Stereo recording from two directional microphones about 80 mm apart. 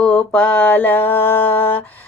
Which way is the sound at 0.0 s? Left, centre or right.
Centre.